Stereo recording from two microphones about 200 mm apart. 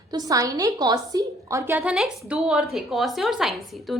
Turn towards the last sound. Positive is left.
turn(degrees=0)  # may be behind; listen again after turning